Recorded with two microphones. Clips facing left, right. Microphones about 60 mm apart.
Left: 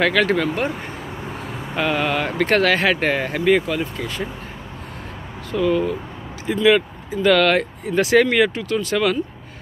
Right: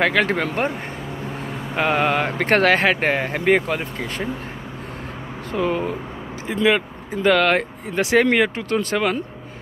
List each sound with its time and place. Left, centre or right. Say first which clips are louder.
0.0 s speech: left 1 dB; right
1.8 s speech: right 2 dB; right
2.4 s speech: even; right
5.5 s speech: left 3 dB; right